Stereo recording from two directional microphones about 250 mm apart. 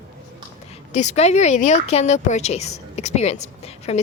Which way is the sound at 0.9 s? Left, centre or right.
Left.